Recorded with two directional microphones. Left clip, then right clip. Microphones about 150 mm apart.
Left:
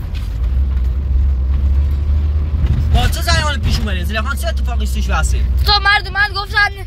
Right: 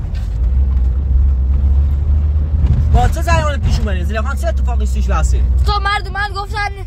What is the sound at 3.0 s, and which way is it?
Speech, 80° right.